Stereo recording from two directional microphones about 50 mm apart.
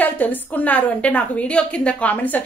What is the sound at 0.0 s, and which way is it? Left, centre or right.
A woman's voice, left.